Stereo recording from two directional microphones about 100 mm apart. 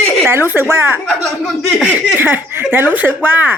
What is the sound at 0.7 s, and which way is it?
Speech, 25° right (ahead or behind).